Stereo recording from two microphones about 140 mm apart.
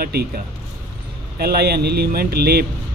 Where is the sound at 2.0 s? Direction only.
90° right.